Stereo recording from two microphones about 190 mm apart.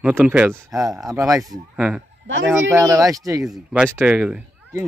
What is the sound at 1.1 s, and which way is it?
Speech, 15° right (ahead or behind).